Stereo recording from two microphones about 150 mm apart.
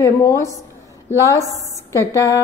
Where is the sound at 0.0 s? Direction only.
15° left (ahead or behind).